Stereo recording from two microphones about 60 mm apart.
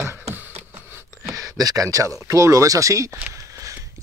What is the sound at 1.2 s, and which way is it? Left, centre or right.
Speech, right.